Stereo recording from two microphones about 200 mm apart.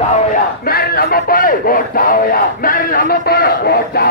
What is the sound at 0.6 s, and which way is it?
Speech, 50° left (ahead or behind).